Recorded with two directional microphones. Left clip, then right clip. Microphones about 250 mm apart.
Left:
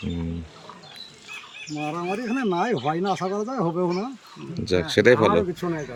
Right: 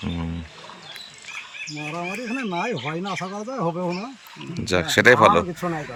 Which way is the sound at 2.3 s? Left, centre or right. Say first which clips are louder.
Left 3 dB; centre.